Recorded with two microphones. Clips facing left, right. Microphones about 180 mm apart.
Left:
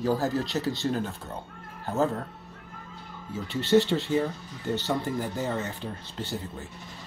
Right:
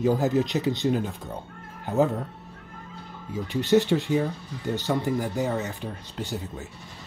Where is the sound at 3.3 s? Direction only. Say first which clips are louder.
Right 1 dB; 15° right (ahead or behind).